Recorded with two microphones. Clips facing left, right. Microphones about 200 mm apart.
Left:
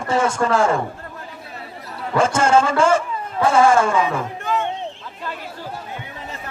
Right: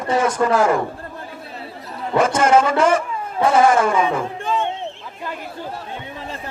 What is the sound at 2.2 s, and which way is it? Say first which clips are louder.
A man's voice: right 1 dB; 25° left (ahead or behind).